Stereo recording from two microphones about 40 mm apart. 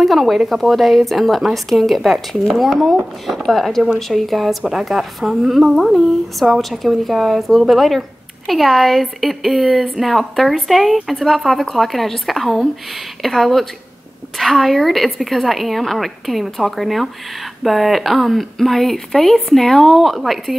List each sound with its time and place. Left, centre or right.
0.0 s a woman's voice: centre